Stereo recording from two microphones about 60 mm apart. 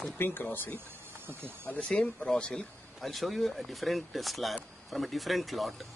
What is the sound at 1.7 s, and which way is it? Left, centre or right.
Speech, left.